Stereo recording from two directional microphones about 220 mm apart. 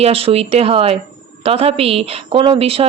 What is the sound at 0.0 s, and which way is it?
A woman's voice, 25° right (ahead or behind).